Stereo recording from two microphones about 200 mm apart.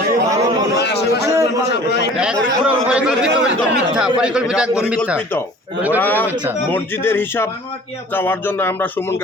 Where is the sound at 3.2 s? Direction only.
60° right (ahead or behind).